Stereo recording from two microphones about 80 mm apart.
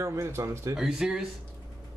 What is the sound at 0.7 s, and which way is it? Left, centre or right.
Speech, centre.